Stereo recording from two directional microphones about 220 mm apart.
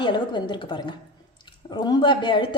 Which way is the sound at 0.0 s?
20° left (ahead or behind).